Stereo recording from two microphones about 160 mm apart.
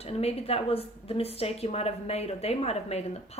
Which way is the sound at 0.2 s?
40° left (ahead or behind).